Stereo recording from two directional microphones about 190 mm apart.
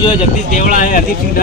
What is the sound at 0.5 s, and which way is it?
Speech, 45° left (ahead or behind).